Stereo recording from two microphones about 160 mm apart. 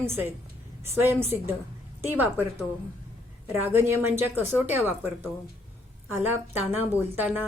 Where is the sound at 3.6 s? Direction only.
15° right (ahead or behind).